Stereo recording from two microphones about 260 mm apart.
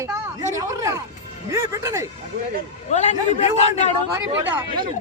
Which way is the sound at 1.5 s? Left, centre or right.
Centre.